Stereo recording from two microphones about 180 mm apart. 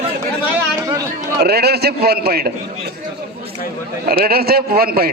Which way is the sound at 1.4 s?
60° right (ahead or behind).